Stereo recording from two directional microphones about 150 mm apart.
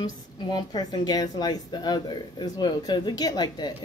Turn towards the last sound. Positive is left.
turn(degrees=25)  # may be behind; listen again after turning